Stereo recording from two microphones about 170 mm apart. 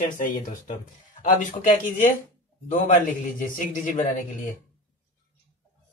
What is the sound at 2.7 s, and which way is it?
A man's voice, 45° left (ahead or behind).